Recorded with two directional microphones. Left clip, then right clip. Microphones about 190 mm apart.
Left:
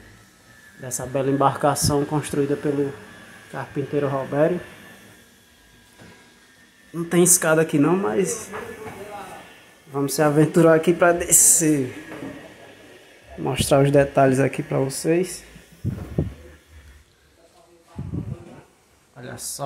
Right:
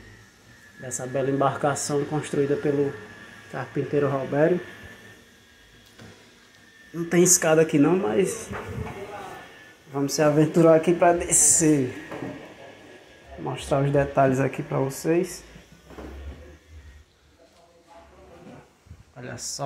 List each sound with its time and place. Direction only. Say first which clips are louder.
0.8 s speech: left 3 dB; 20° left (ahead or behind)
6.9 s speech: left 1 dB; 20° left (ahead or behind)
9.9 s speech: left 2 dB; 20° left (ahead or behind)
13.4 s speech: left 7 dB; 45° left (ahead or behind); by 15.3 s 30° left (ahead or behind)
19.1 s speech: even; 10° left (ahead or behind)